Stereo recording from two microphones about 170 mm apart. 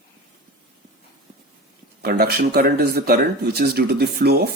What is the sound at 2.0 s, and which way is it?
Speech, 65° right (ahead or behind).